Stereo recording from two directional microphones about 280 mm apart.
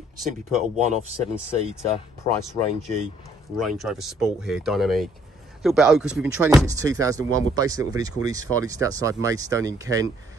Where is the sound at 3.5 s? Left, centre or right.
Centre.